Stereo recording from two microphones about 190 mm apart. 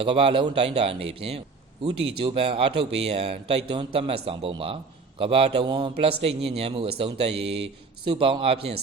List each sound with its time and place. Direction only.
0.0 s a man's voice: 30° right (ahead or behind)